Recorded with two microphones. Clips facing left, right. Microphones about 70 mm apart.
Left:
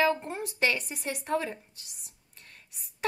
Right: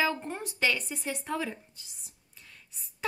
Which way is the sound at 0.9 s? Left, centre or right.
Left.